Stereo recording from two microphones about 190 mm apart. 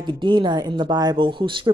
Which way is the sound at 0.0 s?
25° right (ahead or behind).